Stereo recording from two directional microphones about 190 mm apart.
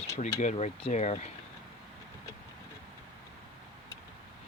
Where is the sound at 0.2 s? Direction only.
35° left (ahead or behind).